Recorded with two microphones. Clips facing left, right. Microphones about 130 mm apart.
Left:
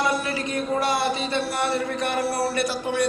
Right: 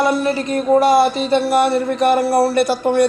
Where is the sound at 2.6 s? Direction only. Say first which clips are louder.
Right 9 dB; 60° right (ahead or behind).